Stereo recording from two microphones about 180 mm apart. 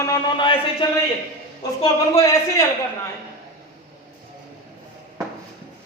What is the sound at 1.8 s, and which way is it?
Speech, 15° left (ahead or behind).